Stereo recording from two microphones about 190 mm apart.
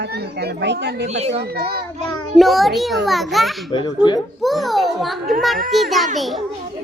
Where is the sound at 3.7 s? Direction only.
20° left (ahead or behind).